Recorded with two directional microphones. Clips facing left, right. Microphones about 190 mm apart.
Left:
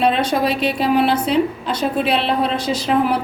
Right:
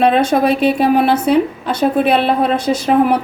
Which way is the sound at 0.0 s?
50° right (ahead or behind).